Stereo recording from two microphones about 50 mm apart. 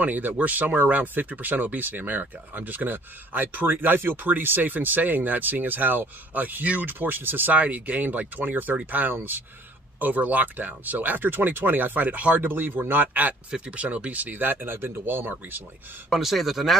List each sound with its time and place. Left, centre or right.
0.0 s speech: right
12.4 s speech: right
13.5 s speech: right
16.1 s speech: centre